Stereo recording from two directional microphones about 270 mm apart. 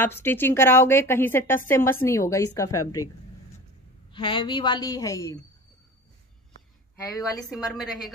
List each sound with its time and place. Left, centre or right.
0.0 s a woman's voice: centre
4.1 s a woman's voice: centre
7.4 s a woman's voice: centre